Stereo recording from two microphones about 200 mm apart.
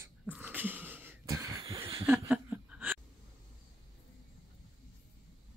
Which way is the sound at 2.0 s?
10° right (ahead or behind).